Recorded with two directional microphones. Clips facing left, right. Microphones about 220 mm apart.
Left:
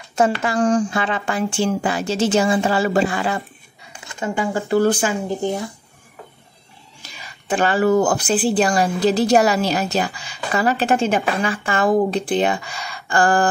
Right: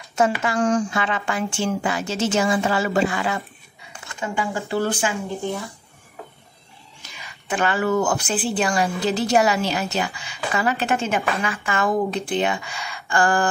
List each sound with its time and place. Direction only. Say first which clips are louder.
0.4 s speech: left 3 dB; 35° left (ahead or behind)
4.2 s speech: left 4 dB; 45° left (ahead or behind)
7.0 s speech: left 2 dB; 30° left (ahead or behind)